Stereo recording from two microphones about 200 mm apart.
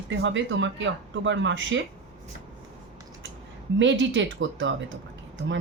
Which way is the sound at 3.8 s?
65° right (ahead or behind).